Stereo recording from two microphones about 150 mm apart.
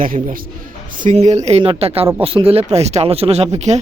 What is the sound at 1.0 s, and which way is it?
Speech, 50° right (ahead or behind).